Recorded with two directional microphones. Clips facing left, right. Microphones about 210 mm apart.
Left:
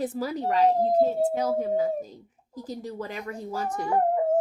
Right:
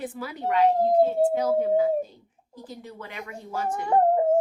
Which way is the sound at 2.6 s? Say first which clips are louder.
Left 6 dB; 40° left (ahead or behind).